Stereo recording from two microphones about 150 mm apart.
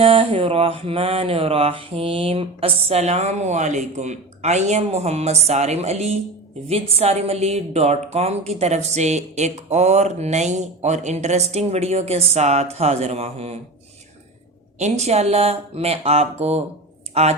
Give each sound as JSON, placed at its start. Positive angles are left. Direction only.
{"t": 0.0, "sound": "a woman's voice", "side_deg": -40}
{"t": 14.8, "sound": "a woman's voice", "side_deg": -50}